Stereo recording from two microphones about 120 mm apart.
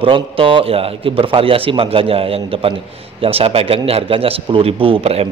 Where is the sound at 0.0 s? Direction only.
50° right (ahead or behind).